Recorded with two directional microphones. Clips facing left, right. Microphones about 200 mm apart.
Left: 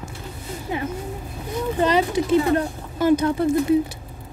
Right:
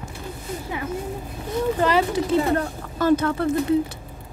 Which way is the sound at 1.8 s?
20° left (ahead or behind).